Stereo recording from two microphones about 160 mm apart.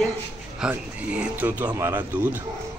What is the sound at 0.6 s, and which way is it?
Speech, 10° right (ahead or behind).